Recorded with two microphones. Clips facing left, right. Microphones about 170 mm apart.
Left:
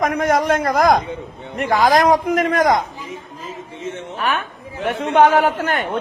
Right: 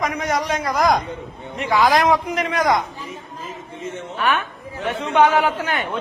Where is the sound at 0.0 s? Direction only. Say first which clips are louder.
Left 5 dB; 55° left (ahead or behind).